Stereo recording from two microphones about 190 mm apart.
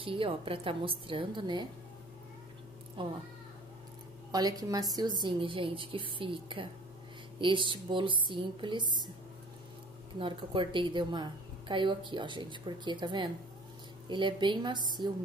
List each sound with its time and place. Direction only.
0.0 s a woman's voice: 30° right (ahead or behind)
3.0 s a woman's voice: 25° right (ahead or behind)
4.3 s a woman's voice: 20° right (ahead or behind)
10.1 s a woman's voice: 25° right (ahead or behind)